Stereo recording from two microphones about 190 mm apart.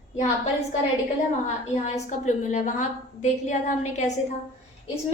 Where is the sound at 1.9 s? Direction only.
40° left (ahead or behind).